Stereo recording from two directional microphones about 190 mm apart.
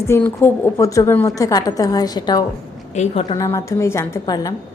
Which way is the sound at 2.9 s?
35° left (ahead or behind).